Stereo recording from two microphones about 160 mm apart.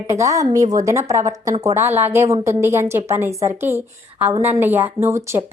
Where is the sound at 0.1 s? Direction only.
20° right (ahead or behind).